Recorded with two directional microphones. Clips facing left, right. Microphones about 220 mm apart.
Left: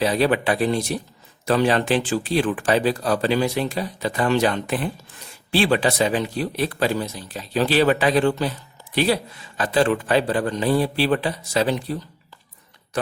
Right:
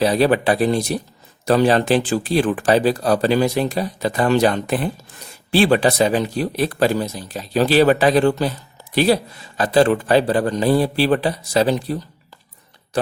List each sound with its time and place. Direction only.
0.0 s speech: 40° right (ahead or behind)
9.6 s speech: 35° right (ahead or behind)